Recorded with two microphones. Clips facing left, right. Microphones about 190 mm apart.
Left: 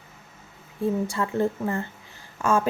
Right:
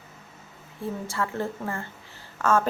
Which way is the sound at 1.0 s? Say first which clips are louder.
Left 5 dB; 20° left (ahead or behind).